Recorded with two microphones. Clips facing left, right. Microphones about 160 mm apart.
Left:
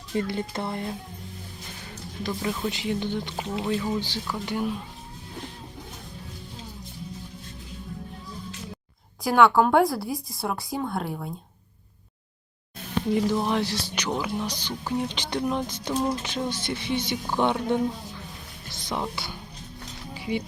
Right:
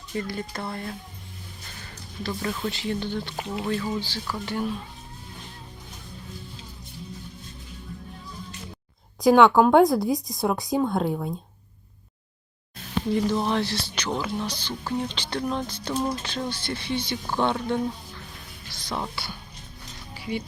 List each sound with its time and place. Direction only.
0.1 s speech: 25° left (ahead or behind)
2.2 s speech: 15° left (ahead or behind)
9.2 s speech: 20° right (ahead or behind)
13.2 s speech: 10° left (ahead or behind)